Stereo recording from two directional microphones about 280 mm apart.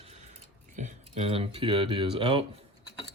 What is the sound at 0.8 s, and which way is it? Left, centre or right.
Speech, right.